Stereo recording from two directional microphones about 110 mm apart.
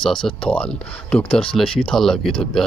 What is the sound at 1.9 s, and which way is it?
Speech, 5° left (ahead or behind).